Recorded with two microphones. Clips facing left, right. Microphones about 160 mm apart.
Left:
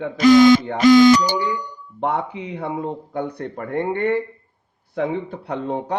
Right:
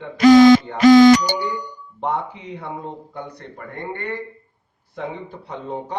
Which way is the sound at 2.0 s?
65° left (ahead or behind).